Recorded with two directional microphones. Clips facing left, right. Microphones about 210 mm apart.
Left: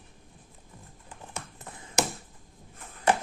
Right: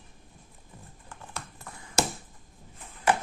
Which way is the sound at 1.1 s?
20° left (ahead or behind).